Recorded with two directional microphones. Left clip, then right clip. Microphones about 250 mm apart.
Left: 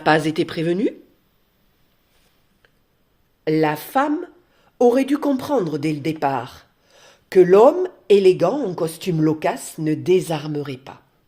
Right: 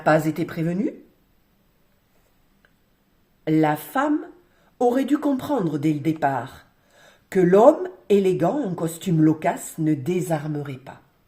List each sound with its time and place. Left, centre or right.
0.3 s speech: left
3.4 s a woman's voice: left